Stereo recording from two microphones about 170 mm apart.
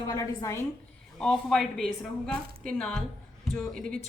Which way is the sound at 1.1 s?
5° left (ahead or behind).